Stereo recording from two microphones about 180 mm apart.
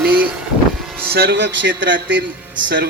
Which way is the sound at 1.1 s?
65° right (ahead or behind).